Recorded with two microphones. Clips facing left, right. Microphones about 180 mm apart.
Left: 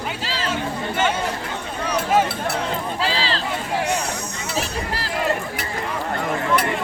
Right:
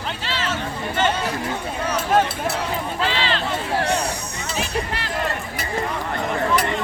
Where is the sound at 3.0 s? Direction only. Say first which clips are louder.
Right 2 dB; 35° left (ahead or behind).